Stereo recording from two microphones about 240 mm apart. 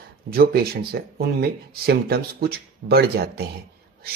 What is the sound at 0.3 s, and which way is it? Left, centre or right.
Speech, right.